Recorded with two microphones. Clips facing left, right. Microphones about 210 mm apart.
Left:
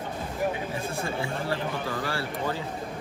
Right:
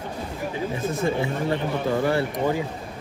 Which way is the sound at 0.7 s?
20° right (ahead or behind).